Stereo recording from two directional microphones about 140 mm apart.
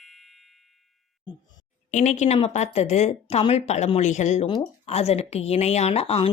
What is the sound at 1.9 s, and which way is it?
Speech, 60° left (ahead or behind).